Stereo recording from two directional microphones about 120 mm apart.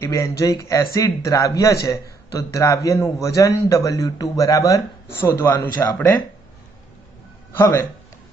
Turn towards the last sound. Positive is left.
turn(degrees=20)  # may be behind; listen again after turning